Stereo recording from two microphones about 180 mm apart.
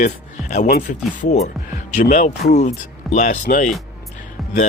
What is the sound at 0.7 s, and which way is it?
Speech, 50° left (ahead or behind).